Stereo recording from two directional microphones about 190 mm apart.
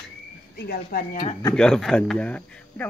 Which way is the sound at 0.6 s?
55° left (ahead or behind).